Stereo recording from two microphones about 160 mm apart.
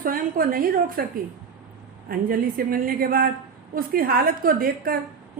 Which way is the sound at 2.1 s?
65° right (ahead or behind).